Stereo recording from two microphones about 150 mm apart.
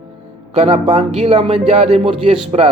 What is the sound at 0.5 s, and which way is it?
Speech, 45° right (ahead or behind).